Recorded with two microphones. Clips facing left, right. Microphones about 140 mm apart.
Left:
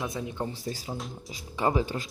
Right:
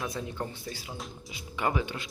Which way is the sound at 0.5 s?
40° left (ahead or behind).